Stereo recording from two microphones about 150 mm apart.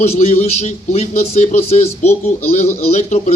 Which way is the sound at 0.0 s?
45° left (ahead or behind).